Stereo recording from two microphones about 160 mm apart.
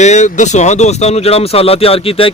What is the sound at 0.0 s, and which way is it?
Speech, 45° left (ahead or behind).